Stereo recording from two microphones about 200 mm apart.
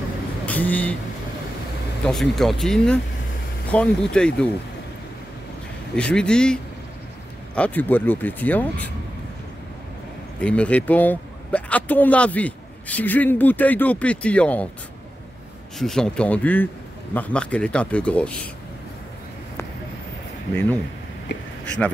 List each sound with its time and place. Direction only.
0.5 s speech: 10° left (ahead or behind)
2.0 s a man's voice: centre (ahead or behind)
5.9 s a man's voice: 5° left (ahead or behind)
10.4 s speech: 5° left (ahead or behind)
15.8 s a man's voice: centre (ahead or behind)
21.3 s speech: 60° left (ahead or behind)
21.6 s speech: 5° left (ahead or behind)